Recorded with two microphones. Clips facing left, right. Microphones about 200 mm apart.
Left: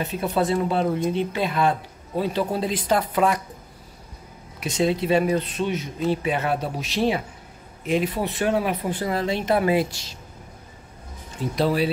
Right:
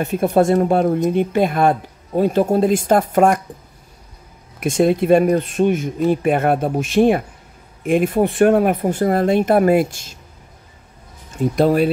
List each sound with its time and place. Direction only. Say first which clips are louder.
0.0 s speech: right 8 dB; 50° right (ahead or behind)
4.6 s speech: right 7 dB; 50° right (ahead or behind)
11.3 s speech: right 7 dB; 50° right (ahead or behind)